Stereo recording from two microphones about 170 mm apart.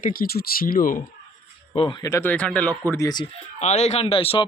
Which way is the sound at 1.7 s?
35° left (ahead or behind).